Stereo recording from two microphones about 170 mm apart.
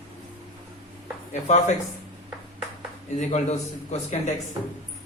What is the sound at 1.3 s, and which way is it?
Speech, 40° left (ahead or behind).